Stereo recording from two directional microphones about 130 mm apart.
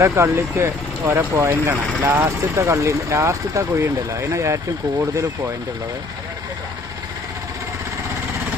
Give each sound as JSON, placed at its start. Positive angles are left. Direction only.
{"t": 0.0, "sound": "speech", "side_deg": -20}